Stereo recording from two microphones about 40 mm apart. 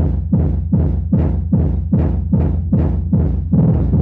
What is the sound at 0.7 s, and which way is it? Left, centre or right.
Music, right.